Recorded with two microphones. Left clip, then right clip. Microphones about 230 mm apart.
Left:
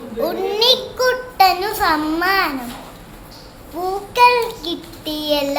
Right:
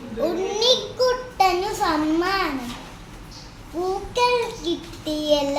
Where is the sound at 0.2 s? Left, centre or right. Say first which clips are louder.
Left 4 dB; centre.